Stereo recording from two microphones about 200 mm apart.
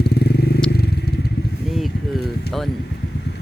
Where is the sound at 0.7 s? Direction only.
50° left (ahead or behind).